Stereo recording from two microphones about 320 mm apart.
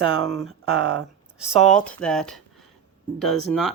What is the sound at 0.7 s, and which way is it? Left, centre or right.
Speech, right.